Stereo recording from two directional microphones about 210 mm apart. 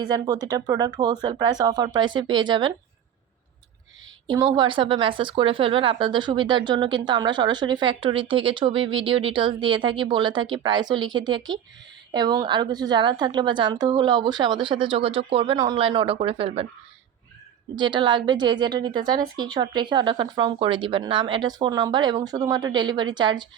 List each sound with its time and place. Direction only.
0.0 s a woman's voice: 20° right (ahead or behind)
4.3 s a woman's voice: 20° right (ahead or behind)
17.7 s a woman's voice: 20° right (ahead or behind)